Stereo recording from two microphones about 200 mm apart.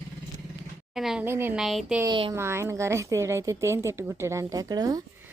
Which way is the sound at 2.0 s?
20° right (ahead or behind).